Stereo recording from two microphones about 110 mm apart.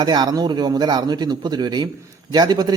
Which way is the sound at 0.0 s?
40° right (ahead or behind).